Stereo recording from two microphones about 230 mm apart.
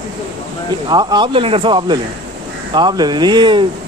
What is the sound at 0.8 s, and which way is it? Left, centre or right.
Speech, centre.